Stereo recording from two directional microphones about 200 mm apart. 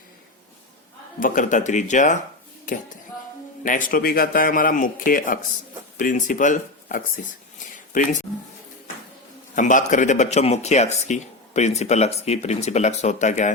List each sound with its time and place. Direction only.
1.2 s speech: 40° left (ahead or behind)
3.6 s a man's voice: 40° left (ahead or behind)
9.6 s speech: 40° left (ahead or behind)